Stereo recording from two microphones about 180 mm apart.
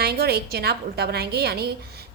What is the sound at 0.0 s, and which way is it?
A woman's voice, 60° right (ahead or behind).